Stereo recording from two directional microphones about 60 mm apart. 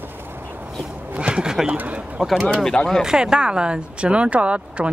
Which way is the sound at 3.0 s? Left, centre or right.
Centre.